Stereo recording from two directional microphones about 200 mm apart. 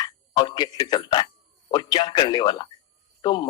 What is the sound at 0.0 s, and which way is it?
Music, 20° left (ahead or behind).